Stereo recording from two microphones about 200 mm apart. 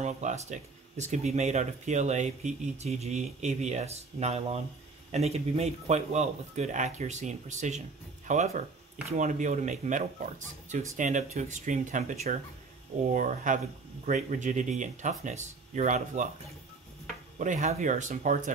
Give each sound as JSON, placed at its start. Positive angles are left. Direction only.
{"t": 0.0, "sound": "speech", "side_deg": -35}
{"t": 17.4, "sound": "speech", "side_deg": -35}